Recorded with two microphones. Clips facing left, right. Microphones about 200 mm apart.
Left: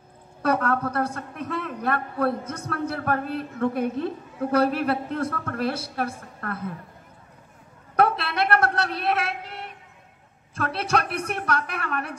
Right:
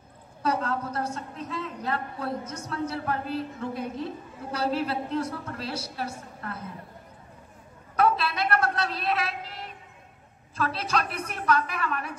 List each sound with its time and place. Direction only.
0.4 s a man's voice: 60° left (ahead or behind)
7.9 s a sound: 60° left (ahead or behind)
10.6 s a man's voice: 65° left (ahead or behind)